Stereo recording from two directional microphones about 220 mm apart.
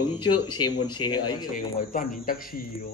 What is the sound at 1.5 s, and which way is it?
Speech, 35° left (ahead or behind).